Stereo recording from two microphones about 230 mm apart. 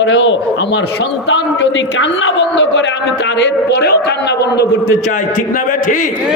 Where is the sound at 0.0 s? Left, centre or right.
Left.